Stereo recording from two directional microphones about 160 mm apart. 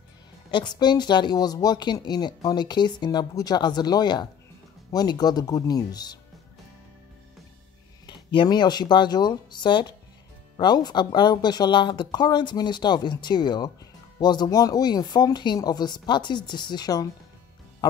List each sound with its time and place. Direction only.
0.5 s a woman's voice: 30° left (ahead or behind)
8.1 s a woman's voice: 30° left (ahead or behind)